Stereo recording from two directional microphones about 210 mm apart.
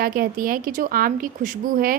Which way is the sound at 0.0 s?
45° right (ahead or behind).